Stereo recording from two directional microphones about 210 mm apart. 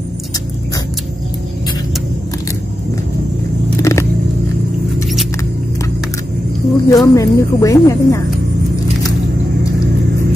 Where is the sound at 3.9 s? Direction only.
15° left (ahead or behind).